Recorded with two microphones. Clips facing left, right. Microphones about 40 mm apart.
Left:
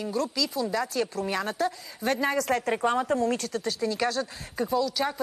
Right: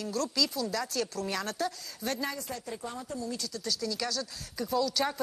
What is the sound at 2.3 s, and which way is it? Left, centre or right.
Speech, left.